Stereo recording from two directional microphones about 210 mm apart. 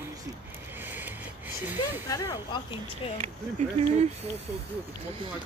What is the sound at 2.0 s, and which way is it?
Speech, 15° left (ahead or behind).